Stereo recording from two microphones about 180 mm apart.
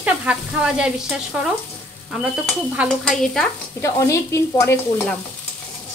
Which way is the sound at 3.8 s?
15° left (ahead or behind).